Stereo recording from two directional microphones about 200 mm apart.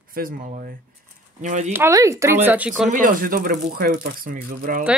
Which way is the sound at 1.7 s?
15° right (ahead or behind).